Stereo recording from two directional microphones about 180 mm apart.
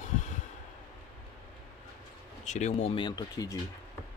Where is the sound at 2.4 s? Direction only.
40° left (ahead or behind).